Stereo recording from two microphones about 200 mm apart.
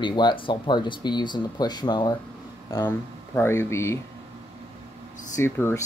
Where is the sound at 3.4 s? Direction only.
15° left (ahead or behind).